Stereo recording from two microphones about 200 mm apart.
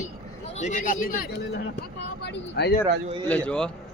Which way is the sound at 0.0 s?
35° left (ahead or behind).